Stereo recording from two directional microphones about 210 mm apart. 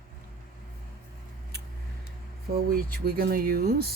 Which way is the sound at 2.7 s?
45° right (ahead or behind).